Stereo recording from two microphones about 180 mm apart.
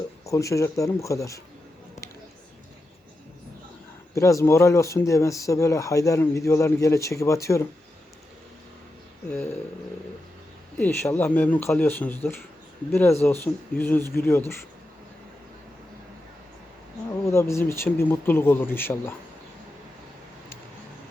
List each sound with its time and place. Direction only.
0.3 s speech: 15° left (ahead or behind)
4.1 s speech: 15° left (ahead or behind)
10.8 s speech: 10° left (ahead or behind)
17.1 s speech: 15° left (ahead or behind)